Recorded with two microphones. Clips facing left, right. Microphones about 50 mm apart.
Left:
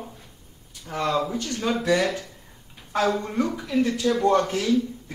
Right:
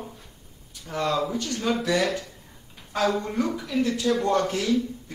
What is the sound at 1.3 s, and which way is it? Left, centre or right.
A man's voice, left.